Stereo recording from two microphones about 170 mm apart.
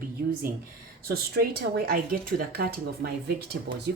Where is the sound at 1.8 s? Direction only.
60° right (ahead or behind).